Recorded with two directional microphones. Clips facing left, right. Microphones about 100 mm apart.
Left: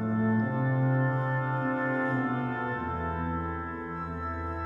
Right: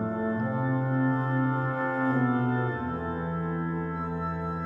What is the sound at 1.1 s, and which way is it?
Music, centre (ahead or behind).